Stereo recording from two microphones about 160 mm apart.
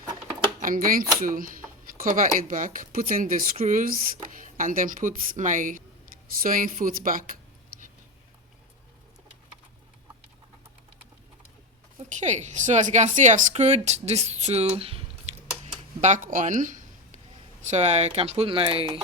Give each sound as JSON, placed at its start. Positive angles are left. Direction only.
{"t": 0.6, "sound": "speech", "side_deg": -60}
{"t": 11.9, "sound": "a woman's voice", "side_deg": -45}
{"t": 15.3, "sound": "a sound", "side_deg": -45}
{"t": 17.7, "sound": "speech", "side_deg": -45}